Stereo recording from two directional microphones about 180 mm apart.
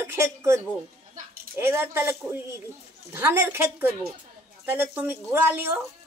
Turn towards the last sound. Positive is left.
turn(degrees=-10)  # may be behind; listen again after turning